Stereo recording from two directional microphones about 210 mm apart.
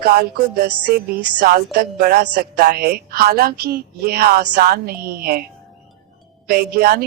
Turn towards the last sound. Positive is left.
turn(degrees=-45)  # may be behind; listen again after turning